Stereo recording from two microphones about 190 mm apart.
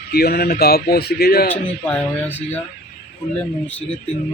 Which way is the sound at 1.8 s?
5° left (ahead or behind).